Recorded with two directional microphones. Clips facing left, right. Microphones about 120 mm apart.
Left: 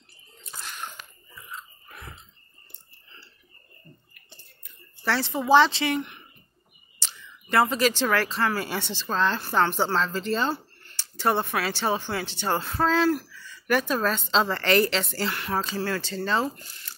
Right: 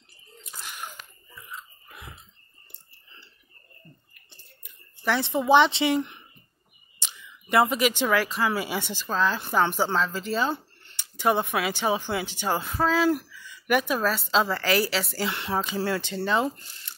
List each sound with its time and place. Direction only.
0.4 s bathtub: 10° right (ahead or behind)
1.5 s a sound: 5° right (ahead or behind)
4.6 s a sound: 15° right (ahead or behind)
5.5 s speech: 20° right (ahead or behind)
7.0 s speech: 15° right (ahead or behind)
10.5 s speech: 20° right (ahead or behind)
15.6 s speech: 20° right (ahead or behind)